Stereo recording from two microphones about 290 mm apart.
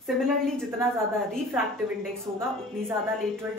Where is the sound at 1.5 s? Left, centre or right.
Centre.